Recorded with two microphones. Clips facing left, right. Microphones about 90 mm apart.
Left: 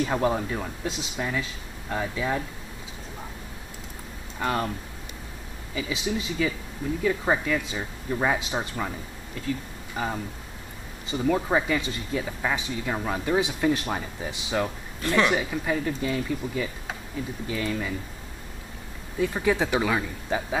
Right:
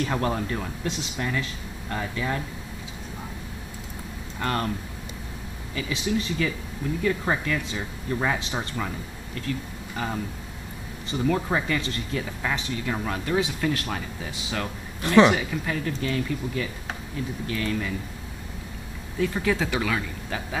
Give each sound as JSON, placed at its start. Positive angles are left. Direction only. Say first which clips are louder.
{"t": 0.0, "sound": "speech", "louder": "left 2 dB", "side_deg": 10}
{"t": 4.4, "sound": "speech", "louder": "left 1 dB", "side_deg": 10}
{"t": 5.8, "sound": "speech", "louder": "right 2 dB", "side_deg": 10}
{"t": 15.0, "sound": "speech", "louder": "right 6 dB", "side_deg": -20}
{"t": 15.3, "sound": "speech", "louder": "left 2 dB", "side_deg": 10}
{"t": 19.1, "sound": "speech", "louder": "left 1 dB", "side_deg": 15}